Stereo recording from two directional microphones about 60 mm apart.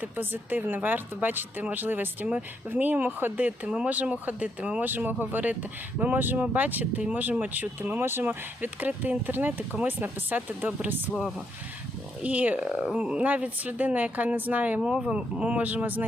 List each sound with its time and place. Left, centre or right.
0.0 s speech: right
12.2 s speech: right
14.8 s speech: centre; by 16.0 s right